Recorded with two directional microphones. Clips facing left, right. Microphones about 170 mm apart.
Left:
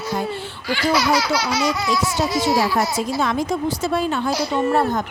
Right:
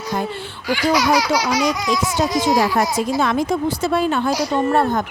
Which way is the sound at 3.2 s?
60° right (ahead or behind).